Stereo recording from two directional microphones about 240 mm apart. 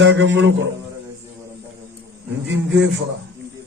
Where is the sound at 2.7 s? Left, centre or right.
Right.